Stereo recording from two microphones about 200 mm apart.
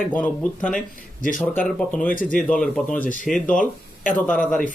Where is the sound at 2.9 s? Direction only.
40° left (ahead or behind).